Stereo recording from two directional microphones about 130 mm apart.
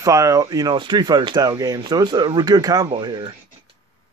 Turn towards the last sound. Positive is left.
turn(degrees=-35)  # may be behind; listen again after turning